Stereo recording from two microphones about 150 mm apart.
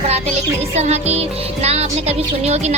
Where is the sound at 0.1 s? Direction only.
50° right (ahead or behind).